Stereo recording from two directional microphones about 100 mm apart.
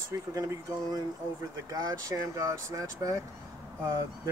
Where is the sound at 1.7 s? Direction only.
40° right (ahead or behind).